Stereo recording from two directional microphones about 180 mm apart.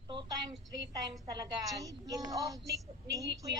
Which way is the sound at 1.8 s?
20° right (ahead or behind).